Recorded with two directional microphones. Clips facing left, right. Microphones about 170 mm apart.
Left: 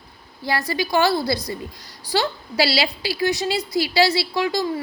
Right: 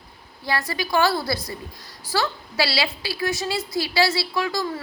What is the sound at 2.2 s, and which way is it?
Speech, 35° left (ahead or behind).